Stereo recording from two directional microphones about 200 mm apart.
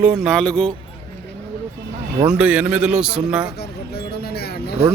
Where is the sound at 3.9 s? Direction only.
55° left (ahead or behind).